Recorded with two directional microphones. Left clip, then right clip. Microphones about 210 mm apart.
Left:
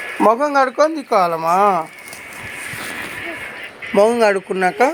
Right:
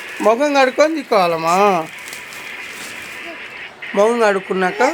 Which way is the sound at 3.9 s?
15° left (ahead or behind).